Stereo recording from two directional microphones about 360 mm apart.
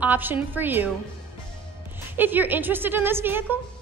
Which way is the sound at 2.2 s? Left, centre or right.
Centre.